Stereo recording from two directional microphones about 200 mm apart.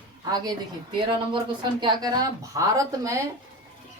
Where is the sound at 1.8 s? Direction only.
20° right (ahead or behind).